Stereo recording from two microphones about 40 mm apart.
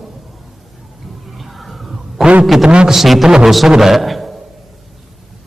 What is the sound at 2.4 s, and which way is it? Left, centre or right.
A man's voice, centre.